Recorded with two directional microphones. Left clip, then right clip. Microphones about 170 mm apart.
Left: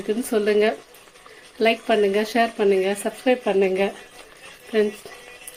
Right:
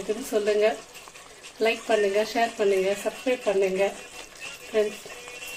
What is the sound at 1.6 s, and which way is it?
Speech, 55° left (ahead or behind).